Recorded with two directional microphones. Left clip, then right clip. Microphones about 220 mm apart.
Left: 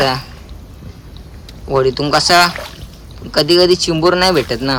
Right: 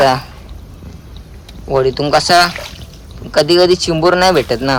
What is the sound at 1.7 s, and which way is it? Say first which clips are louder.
Speech: right 1 dB; 10° left (ahead or behind).